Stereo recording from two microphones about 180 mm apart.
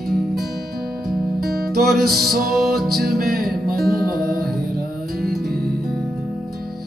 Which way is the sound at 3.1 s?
55° right (ahead or behind).